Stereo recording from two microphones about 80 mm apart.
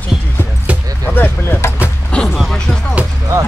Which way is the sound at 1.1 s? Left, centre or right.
Left.